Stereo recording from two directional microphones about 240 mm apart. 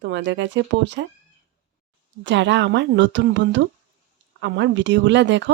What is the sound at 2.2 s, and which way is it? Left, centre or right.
Speech, right.